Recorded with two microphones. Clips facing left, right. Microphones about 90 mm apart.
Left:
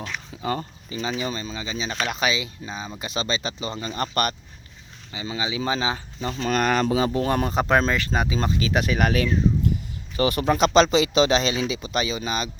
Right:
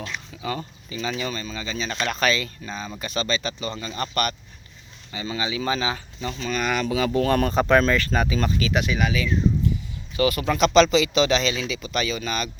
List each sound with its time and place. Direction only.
0.4 s speech: 35° left (ahead or behind); by 2.9 s 15° left (ahead or behind)
3.0 s speech: 30° left (ahead or behind)
5.1 s speech: 15° left (ahead or behind)
6.3 s speech: 50° left (ahead or behind); by 7.1 s 30° left (ahead or behind)
7.1 s speech: 20° left (ahead or behind); by 9.0 s 35° left (ahead or behind)
9.0 s speech: 55° left (ahead or behind)
10.2 s speech: 35° left (ahead or behind)